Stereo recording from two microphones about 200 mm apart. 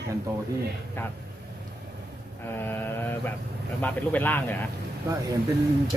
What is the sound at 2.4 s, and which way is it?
Mantra, 10° left (ahead or behind).